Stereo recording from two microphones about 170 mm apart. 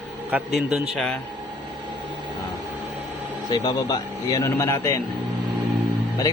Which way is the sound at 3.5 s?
25° left (ahead or behind).